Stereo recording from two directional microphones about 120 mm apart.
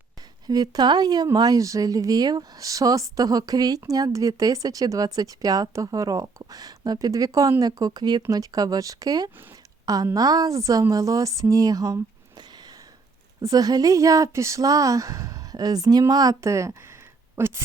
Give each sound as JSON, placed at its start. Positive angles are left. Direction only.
{"t": 0.4, "sound": "a woman's voice", "side_deg": -30}
{"t": 13.4, "sound": "speech", "side_deg": -30}
{"t": 17.3, "sound": "a sound", "side_deg": -20}